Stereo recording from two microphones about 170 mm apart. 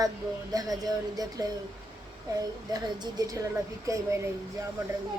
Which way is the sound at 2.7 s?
25° right (ahead or behind).